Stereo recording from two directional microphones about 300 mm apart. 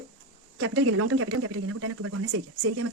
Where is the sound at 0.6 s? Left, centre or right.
Right.